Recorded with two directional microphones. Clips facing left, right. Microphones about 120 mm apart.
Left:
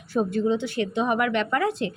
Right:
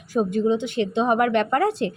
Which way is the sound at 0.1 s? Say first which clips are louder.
Right 2 dB; 15° right (ahead or behind).